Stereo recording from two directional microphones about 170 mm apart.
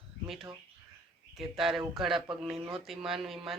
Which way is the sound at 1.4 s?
Centre (ahead or behind).